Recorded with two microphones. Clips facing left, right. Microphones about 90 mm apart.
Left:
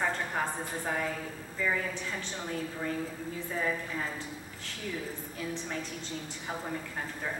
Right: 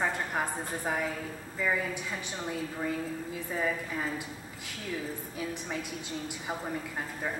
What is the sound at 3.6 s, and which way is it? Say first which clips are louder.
Speech: right 2 dB; 10° right (ahead or behind).